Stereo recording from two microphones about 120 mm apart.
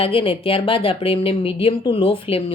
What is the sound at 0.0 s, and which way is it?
A woman's voice, 50° left (ahead or behind).